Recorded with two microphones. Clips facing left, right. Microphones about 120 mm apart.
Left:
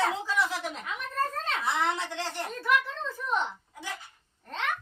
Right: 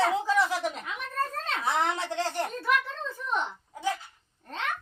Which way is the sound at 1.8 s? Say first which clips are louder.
Right 2 dB; 40° right (ahead or behind).